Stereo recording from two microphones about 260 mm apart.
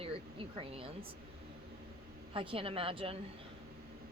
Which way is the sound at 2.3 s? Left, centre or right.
Centre.